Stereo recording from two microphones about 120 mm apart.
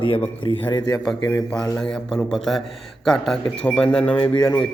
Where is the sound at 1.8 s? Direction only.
5° left (ahead or behind).